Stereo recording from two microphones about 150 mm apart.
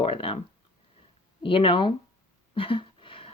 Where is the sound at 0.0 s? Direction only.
40° left (ahead or behind).